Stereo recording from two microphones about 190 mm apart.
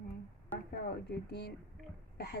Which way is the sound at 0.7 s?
55° left (ahead or behind).